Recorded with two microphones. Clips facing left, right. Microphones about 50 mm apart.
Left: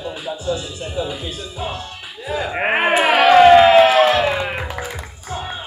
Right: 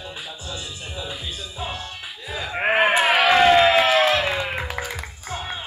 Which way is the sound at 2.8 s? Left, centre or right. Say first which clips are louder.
Left 4 dB; centre.